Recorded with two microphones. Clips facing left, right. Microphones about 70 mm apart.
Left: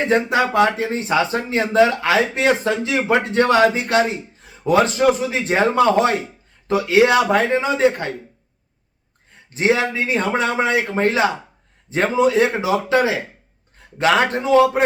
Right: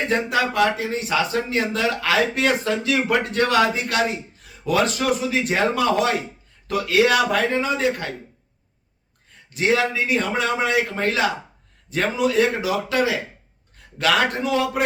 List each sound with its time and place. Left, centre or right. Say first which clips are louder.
0.1 s speech: left 5 dB; left
9.5 s speech: left 2 dB; left